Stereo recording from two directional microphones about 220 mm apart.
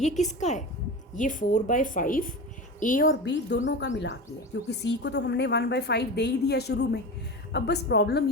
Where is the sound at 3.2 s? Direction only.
55° left (ahead or behind).